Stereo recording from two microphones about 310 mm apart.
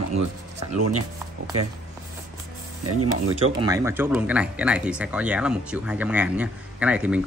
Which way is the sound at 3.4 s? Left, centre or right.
Centre.